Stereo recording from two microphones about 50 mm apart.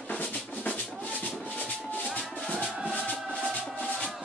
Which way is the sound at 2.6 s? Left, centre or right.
Right.